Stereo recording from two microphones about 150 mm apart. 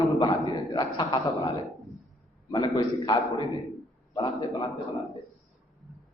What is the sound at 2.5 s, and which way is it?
Speech, 30° left (ahead or behind).